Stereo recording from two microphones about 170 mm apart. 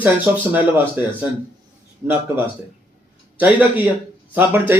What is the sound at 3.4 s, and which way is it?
A man's voice, 10° right (ahead or behind).